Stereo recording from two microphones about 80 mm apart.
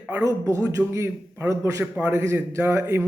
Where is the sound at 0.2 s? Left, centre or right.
Right.